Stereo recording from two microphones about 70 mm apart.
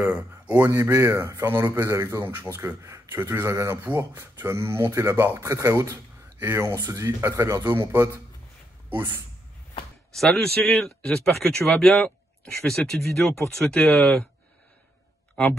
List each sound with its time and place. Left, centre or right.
0.7 s speech: right
1.7 s speech: right
2.8 s a sound: right
3.3 s speech: right
7.6 s speech: right
10.1 s a man's voice: centre